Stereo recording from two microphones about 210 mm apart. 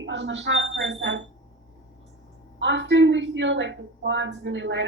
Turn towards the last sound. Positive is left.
turn(degrees=-60)  # may be behind; listen again after turning